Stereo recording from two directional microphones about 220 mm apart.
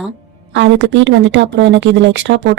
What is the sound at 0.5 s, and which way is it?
Speech, 55° right (ahead or behind).